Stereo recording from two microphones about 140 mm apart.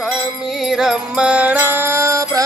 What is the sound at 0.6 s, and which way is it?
Music, 5° right (ahead or behind).